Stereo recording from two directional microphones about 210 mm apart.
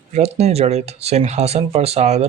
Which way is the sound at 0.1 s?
30° right (ahead or behind).